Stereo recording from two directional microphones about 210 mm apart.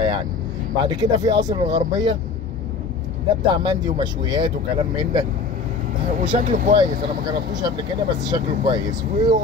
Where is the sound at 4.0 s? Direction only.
20° right (ahead or behind).